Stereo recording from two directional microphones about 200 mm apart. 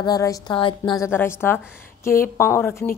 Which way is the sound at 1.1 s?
10° left (ahead or behind).